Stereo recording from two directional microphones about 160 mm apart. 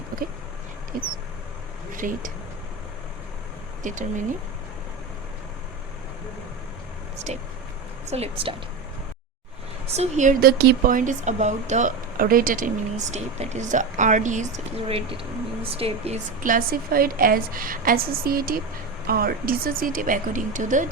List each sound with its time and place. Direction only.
2.0 s a woman's voice: 55° right (ahead or behind)
3.8 s a woman's voice: 50° right (ahead or behind)
7.3 s a woman's voice: 40° right (ahead or behind)
9.8 s a woman's voice: 40° right (ahead or behind)
10.4 s a woman's voice: 75° right (ahead or behind); by 16.1 s 35° right (ahead or behind)
16.4 s a woman's voice: 60° right (ahead or behind)